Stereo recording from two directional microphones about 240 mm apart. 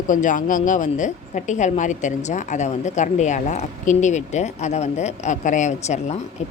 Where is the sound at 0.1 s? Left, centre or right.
Left.